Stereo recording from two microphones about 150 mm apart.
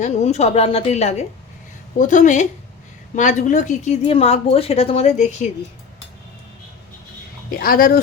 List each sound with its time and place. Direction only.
0.0 s speech: 45° left (ahead or behind)
2.0 s a woman's voice: 55° left (ahead or behind)
7.5 s speech: 75° left (ahead or behind)